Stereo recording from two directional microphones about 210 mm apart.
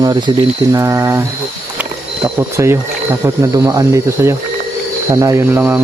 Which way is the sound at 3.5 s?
15° right (ahead or behind).